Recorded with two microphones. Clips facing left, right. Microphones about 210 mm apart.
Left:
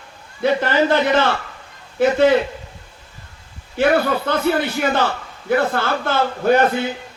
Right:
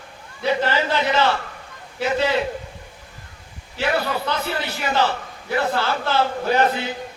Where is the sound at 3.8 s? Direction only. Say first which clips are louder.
Left 6 dB; 50° left (ahead or behind).